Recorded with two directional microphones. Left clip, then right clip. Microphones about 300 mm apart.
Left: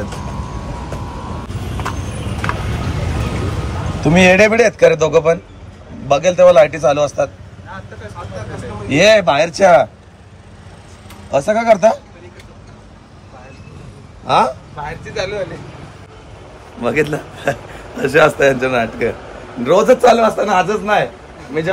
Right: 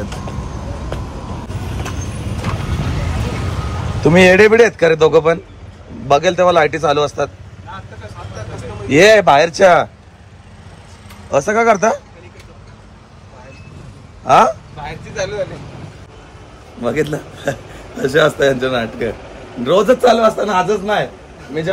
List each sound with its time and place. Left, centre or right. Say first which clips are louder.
4.0 s a man's voice: right 1 dB; centre
8.8 s a man's voice: right 2 dB; centre
11.2 s speech: even; centre
14.3 s speech: right 3 dB; centre
16.8 s a man's voice: left 2 dB; centre